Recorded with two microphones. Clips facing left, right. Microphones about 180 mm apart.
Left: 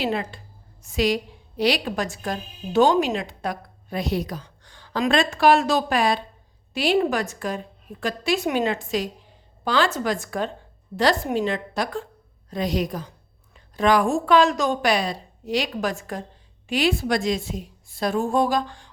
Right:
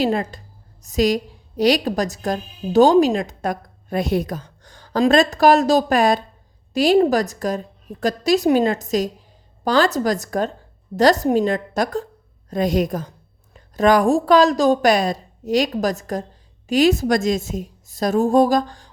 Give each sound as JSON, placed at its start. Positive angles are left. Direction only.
{"t": 0.0, "sound": "a woman's voice", "side_deg": -40}